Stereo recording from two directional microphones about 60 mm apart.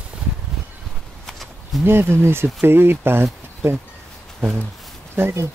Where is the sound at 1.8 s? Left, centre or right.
Right.